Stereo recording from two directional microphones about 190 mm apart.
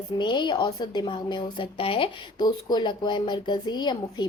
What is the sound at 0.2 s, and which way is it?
A woman's voice, 25° left (ahead or behind).